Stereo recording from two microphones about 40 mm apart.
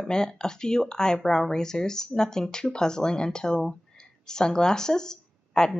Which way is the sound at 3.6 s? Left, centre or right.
Centre.